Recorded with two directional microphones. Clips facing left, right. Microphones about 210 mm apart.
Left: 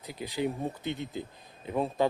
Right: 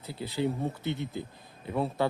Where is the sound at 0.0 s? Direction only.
15° left (ahead or behind).